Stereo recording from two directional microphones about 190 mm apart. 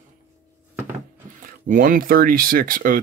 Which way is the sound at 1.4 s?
45° right (ahead or behind).